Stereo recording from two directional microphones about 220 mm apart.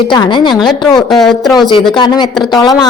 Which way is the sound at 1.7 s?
20° left (ahead or behind).